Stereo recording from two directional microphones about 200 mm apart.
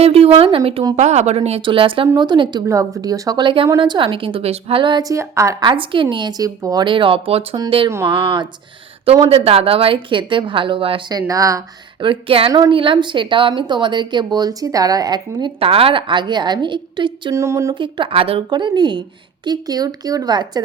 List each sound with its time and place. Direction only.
0.0 s a woman's voice: 30° right (ahead or behind); by 8.1 s 15° right (ahead or behind)
9.2 s a woman's voice: 30° right (ahead or behind)